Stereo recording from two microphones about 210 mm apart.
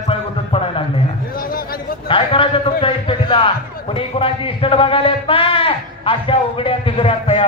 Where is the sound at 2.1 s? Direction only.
25° left (ahead or behind).